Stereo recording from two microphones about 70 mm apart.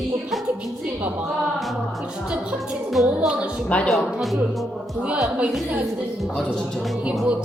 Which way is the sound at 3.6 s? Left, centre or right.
Centre.